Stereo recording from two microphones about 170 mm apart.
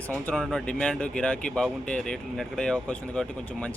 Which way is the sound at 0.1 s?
10° left (ahead or behind).